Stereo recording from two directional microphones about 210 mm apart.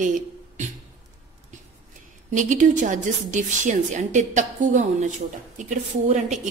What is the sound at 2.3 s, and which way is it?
A woman's voice, 35° right (ahead or behind).